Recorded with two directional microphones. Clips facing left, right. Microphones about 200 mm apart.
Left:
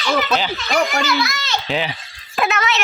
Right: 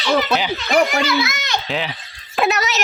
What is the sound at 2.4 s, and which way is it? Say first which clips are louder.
Speech: right 1 dB; 40° right (ahead or behind).